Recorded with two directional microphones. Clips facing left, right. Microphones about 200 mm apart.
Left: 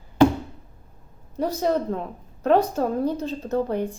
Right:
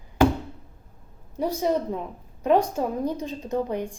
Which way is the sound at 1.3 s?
10° right (ahead or behind).